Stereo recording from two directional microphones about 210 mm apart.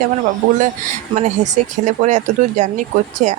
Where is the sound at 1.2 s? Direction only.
35° right (ahead or behind).